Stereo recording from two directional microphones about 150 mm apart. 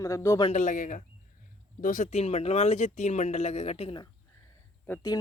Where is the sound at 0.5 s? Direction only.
55° left (ahead or behind); by 4.0 s 40° left (ahead or behind).